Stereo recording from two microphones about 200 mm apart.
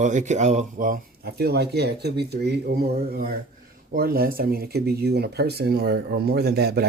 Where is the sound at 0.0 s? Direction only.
35° right (ahead or behind).